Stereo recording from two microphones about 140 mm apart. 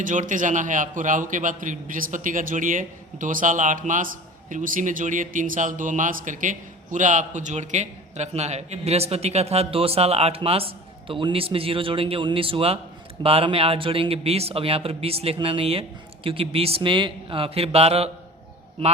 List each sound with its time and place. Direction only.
0.0 s a man's voice: 65° right (ahead or behind); by 18.9 s 40° right (ahead or behind)